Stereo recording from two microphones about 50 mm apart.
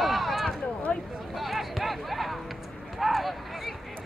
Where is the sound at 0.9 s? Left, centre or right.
Centre.